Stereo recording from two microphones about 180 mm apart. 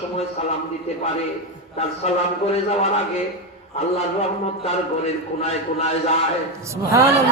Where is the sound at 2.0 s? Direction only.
35° left (ahead or behind).